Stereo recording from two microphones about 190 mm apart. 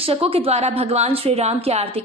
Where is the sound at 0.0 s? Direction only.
30° right (ahead or behind).